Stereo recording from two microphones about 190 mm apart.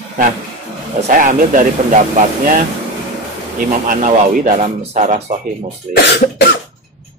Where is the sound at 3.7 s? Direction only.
45° right (ahead or behind).